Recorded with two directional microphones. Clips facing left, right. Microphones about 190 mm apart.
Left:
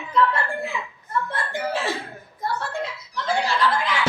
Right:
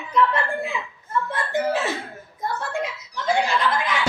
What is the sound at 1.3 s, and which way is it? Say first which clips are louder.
Speech: right 4 dB; 20° right (ahead or behind).